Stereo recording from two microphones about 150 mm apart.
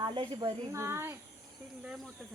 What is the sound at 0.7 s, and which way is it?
Speech, 15° right (ahead or behind).